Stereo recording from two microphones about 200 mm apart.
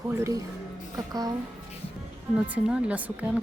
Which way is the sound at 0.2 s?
15° right (ahead or behind).